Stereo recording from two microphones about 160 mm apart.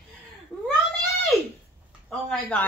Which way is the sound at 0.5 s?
5° right (ahead or behind).